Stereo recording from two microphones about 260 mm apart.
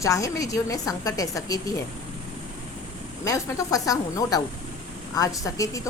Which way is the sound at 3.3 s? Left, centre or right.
Centre.